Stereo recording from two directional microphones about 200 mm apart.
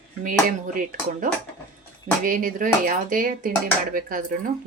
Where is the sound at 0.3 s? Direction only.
40° right (ahead or behind).